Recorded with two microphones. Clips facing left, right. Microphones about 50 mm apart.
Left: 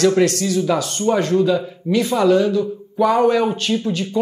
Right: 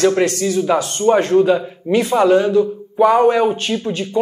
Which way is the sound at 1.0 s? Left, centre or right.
Right.